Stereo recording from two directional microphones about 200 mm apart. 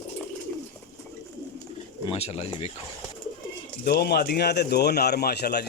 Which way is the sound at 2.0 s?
30° left (ahead or behind).